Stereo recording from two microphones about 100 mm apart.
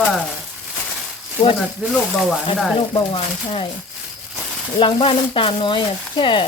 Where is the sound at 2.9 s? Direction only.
55° left (ahead or behind).